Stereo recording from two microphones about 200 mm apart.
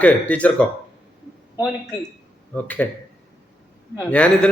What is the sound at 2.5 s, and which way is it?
Speech, 10° left (ahead or behind).